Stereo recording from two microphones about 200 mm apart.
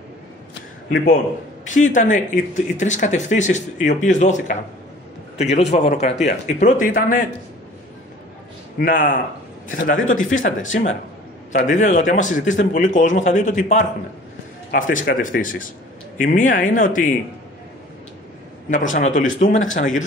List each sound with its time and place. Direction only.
0.9 s a man's voice: 40° left (ahead or behind)
8.7 s a man's voice: 40° left (ahead or behind)
18.7 s a man's voice: 40° left (ahead or behind)